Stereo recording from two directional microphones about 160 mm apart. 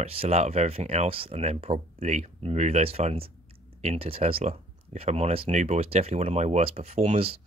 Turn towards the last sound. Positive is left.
turn(degrees=-40)  # may be behind; listen again after turning